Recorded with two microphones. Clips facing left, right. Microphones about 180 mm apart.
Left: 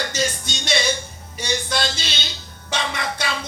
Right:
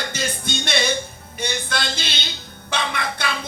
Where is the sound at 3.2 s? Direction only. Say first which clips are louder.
Even; 55° right (ahead or behind).